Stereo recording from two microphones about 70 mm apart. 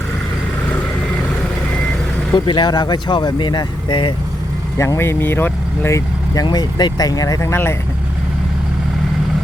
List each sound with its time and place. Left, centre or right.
2.3 s speech: left
4.9 s speech: left
6.3 s speech: left
7.4 s speech: left